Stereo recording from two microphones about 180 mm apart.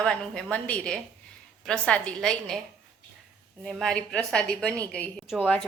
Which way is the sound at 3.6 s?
Centre (ahead or behind).